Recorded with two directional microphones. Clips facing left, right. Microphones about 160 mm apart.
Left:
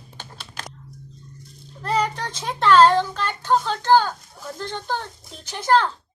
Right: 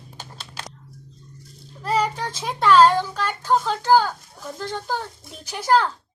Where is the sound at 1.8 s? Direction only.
5° right (ahead or behind).